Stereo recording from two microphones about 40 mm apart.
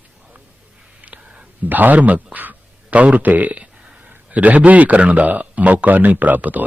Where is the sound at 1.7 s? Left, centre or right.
Right.